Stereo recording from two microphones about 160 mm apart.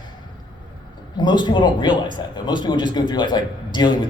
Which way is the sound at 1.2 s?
30° left (ahead or behind).